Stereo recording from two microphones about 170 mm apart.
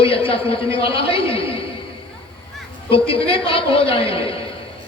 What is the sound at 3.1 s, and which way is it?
A man's voice, 30° left (ahead or behind).